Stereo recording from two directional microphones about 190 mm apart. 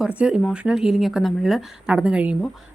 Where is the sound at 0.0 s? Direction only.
5° right (ahead or behind).